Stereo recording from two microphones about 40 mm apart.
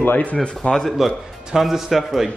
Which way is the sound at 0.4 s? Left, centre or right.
Left.